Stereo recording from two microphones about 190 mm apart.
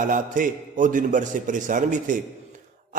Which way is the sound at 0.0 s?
45° right (ahead or behind).